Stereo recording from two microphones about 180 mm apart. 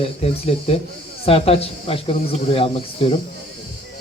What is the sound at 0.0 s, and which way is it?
Speech, 35° left (ahead or behind).